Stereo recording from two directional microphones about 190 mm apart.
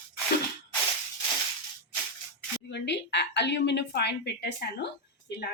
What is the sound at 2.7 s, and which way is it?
A woman's voice, 65° left (ahead or behind).